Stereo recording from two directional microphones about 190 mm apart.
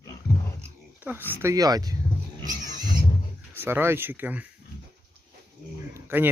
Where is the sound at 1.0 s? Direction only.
10° right (ahead or behind).